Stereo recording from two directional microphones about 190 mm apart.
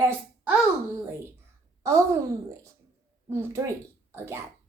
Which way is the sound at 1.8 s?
15° right (ahead or behind).